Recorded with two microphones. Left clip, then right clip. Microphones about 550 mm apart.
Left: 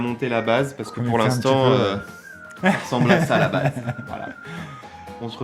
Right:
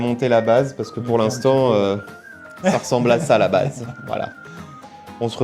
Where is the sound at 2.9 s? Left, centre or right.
Right.